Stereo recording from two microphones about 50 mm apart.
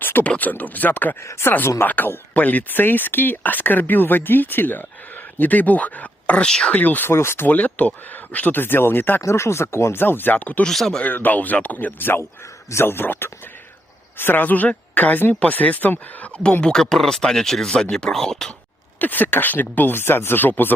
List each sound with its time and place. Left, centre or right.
0.0 s a sound: left
0.3 s speech: left
1.2 s speech: left
1.8 s speech: left
7.1 s speech: left
7.4 s speech: left
8.5 s speech: left
9.2 s speech: left
10.0 s speech: left
10.7 s speech: centre
11.0 s speech: left
16.4 s speech: centre
18.9 s speech: left